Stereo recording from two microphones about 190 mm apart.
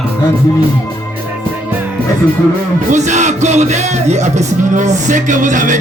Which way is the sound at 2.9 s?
40° right (ahead or behind).